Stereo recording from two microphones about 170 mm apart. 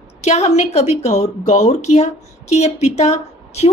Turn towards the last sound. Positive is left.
turn(degrees=40)  # may be behind; listen again after turning